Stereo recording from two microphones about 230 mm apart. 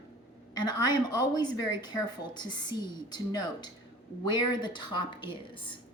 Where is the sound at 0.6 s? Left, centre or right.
Centre.